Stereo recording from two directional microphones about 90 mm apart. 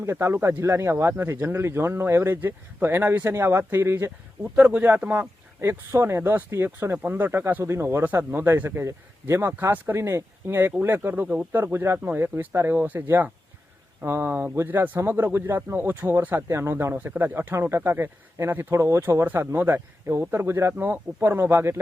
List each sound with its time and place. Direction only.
0.0 s speech: 30° right (ahead or behind)
5.5 s speech: 30° right (ahead or behind)